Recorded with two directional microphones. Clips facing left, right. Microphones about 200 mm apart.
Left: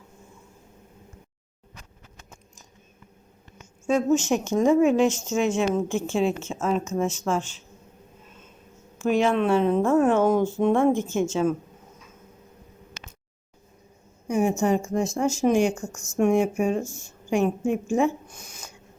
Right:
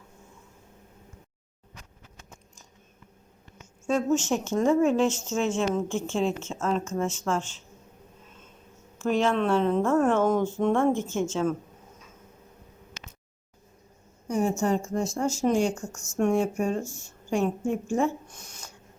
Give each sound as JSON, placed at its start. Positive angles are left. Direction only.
{"t": 3.8, "sound": "speech", "side_deg": 15}
{"t": 9.0, "sound": "speech", "side_deg": 10}
{"t": 14.3, "sound": "speech", "side_deg": 15}